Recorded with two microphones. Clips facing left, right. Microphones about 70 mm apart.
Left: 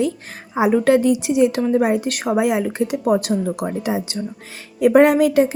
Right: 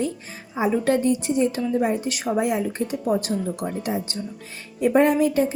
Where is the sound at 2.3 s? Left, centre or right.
Left.